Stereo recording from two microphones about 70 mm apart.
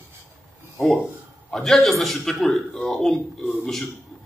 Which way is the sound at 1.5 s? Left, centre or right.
Centre.